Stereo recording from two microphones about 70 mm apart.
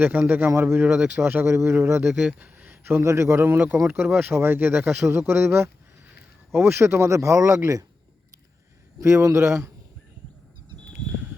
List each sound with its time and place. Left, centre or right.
0.0 s a man's voice: right
2.0 s speech: centre
2.4 s a sound: right
3.1 s speech: right
9.0 s speech: right